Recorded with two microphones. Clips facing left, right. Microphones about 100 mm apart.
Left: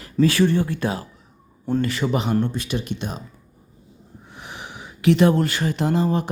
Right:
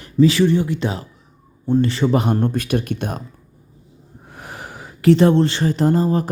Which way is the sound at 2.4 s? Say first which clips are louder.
Right 6 dB; 50° right (ahead or behind).